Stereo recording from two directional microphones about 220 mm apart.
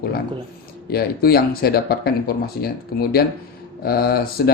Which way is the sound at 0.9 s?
45° left (ahead or behind).